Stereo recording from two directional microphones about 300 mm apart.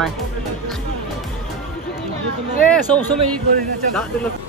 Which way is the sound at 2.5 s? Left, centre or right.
Centre.